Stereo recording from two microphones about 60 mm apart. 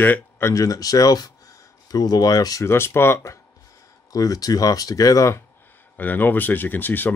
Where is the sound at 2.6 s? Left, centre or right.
Left.